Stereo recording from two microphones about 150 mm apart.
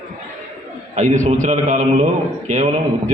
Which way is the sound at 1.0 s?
55° right (ahead or behind).